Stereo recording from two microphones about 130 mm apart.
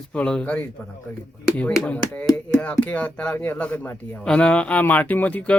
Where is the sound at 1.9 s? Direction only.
10° left (ahead or behind).